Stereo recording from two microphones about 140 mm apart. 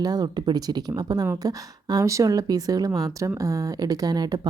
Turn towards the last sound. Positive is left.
turn(degrees=-30)  # may be behind; listen again after turning